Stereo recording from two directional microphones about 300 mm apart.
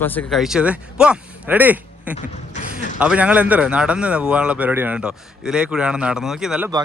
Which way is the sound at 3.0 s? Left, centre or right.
Centre.